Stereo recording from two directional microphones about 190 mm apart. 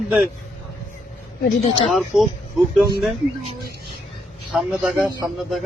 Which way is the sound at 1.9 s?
Centre (ahead or behind).